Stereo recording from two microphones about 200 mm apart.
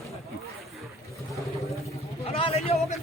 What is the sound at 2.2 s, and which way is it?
Vehicle, 30° left (ahead or behind).